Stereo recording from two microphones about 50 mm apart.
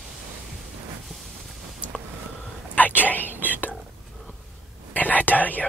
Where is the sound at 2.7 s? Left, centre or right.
Left.